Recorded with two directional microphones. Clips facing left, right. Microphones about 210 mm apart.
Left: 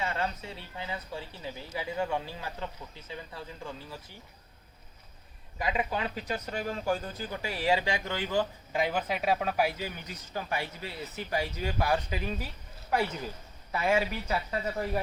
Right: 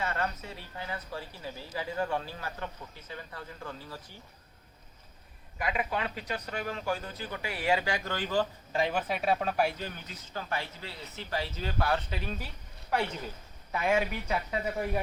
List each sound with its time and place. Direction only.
0.0 s speech: 15° left (ahead or behind)
5.5 s speech: 25° left (ahead or behind); by 15.0 s 5° right (ahead or behind)